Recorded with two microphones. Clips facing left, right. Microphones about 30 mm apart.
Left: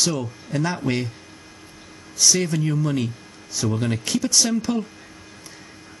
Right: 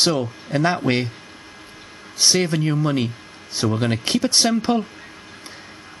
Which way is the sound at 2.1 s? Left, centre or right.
Right.